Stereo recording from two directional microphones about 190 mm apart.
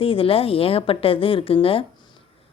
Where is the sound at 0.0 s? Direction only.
30° left (ahead or behind).